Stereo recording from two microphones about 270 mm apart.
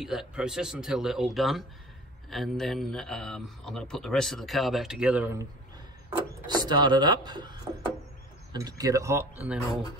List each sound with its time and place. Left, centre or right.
0.0 s speech: centre
6.4 s speech: centre